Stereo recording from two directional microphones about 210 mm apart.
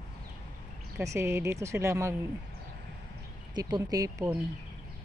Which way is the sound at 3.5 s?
20° right (ahead or behind).